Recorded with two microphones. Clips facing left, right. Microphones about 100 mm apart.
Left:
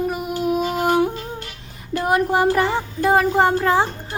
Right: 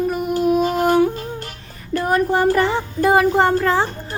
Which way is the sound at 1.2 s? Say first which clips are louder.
Right 2 dB; 45° right (ahead or behind).